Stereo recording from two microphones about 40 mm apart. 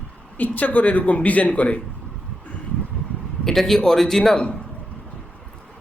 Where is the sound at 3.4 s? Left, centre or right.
Centre.